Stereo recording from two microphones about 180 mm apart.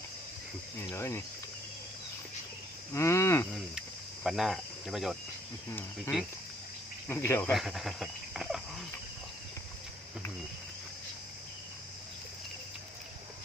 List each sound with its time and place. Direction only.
0.8 s livestock: 15° left (ahead or behind)
2.9 s livestock: 15° left (ahead or behind)
3.5 s speech: centre (ahead or behind)
7.1 s livestock: 15° left (ahead or behind)
7.5 s speech: centre (ahead or behind)